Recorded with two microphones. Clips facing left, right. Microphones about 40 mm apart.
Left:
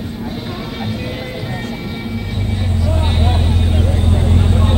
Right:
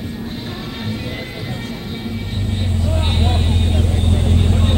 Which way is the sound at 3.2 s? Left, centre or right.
Centre.